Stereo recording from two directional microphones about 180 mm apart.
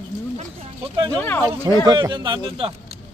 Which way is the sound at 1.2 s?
10° left (ahead or behind).